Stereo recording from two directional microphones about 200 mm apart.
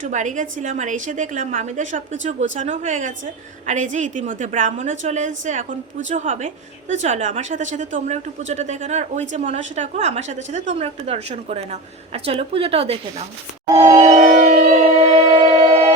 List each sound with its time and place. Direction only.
0.0 s a woman's voice: 40° right (ahead or behind)
13.7 s a sound: 20° right (ahead or behind)
14.1 s music: 40° right (ahead or behind)